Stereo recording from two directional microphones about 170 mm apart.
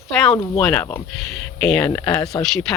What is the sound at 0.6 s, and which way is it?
Speech, 10° left (ahead or behind).